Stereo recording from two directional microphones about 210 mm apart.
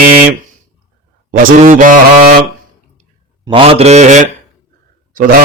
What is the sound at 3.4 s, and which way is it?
Speech, 25° right (ahead or behind).